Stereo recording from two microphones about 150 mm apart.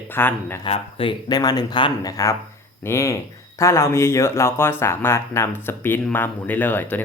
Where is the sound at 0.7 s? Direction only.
40° left (ahead or behind).